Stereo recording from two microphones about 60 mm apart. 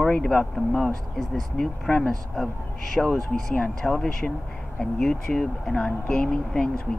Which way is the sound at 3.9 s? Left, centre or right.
Centre.